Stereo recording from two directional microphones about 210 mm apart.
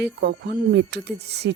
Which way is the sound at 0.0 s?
55° right (ahead or behind).